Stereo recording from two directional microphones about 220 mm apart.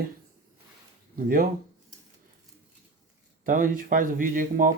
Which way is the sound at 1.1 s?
40° right (ahead or behind).